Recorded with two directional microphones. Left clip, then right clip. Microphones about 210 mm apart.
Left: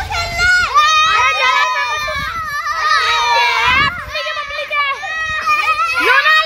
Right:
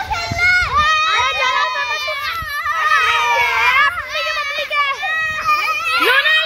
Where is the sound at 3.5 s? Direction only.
Centre (ahead or behind).